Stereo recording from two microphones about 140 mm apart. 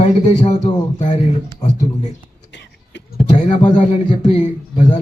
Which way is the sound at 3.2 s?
60° left (ahead or behind).